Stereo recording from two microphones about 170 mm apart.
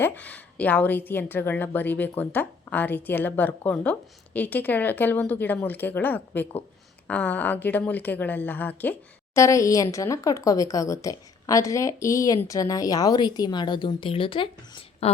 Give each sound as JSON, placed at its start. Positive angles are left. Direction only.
{"t": 0.0, "sound": "a woman's voice", "side_deg": 10}